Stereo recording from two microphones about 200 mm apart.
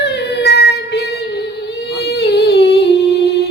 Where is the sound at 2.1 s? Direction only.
55° left (ahead or behind).